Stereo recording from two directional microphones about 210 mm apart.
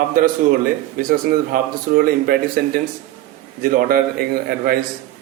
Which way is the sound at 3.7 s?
45° right (ahead or behind).